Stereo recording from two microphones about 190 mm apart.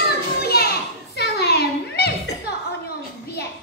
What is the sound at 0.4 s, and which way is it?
Children playing, 55° left (ahead or behind).